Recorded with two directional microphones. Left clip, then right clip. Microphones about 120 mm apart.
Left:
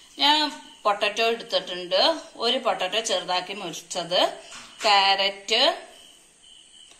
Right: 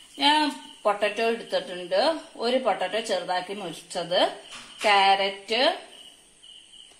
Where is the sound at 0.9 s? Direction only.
50° right (ahead or behind).